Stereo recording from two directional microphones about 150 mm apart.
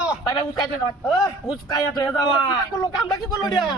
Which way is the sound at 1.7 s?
25° left (ahead or behind).